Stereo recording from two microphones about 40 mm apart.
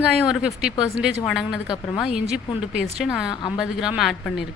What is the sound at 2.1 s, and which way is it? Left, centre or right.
A woman's voice, right.